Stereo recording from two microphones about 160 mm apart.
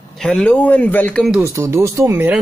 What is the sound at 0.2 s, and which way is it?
Speech, 5° left (ahead or behind).